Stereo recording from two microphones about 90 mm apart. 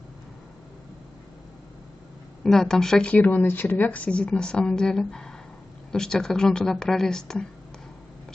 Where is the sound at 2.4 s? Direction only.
5° left (ahead or behind).